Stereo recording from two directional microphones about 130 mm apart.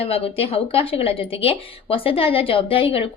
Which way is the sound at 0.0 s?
50° left (ahead or behind).